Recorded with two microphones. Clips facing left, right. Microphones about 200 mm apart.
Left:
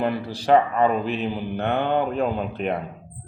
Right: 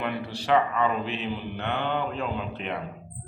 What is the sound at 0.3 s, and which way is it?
Speech, 40° left (ahead or behind).